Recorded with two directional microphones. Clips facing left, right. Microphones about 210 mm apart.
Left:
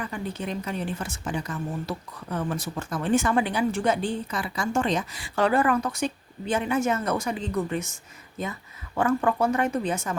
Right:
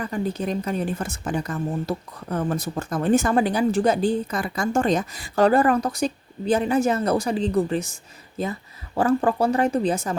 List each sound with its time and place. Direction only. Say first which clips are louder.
0.0 s a woman's voice: right 6 dB; 40° right (ahead or behind)